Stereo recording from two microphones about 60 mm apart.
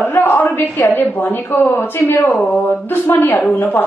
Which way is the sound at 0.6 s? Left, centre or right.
Left.